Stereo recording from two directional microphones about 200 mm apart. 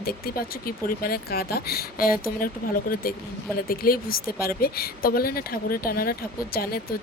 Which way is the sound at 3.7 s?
45° left (ahead or behind).